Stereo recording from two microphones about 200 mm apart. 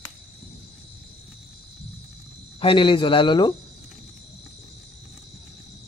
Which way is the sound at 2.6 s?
25° left (ahead or behind).